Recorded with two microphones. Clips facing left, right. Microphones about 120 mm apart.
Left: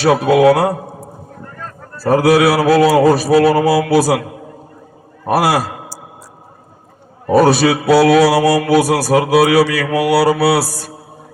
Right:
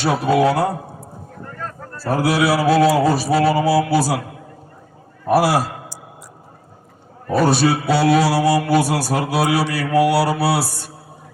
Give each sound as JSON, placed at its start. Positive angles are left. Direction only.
{"t": 0.0, "sound": "speech", "side_deg": 90}
{"t": 2.0, "sound": "speech", "side_deg": 85}
{"t": 5.2, "sound": "a man's voice", "side_deg": 90}
{"t": 7.3, "sound": "speech", "side_deg": 90}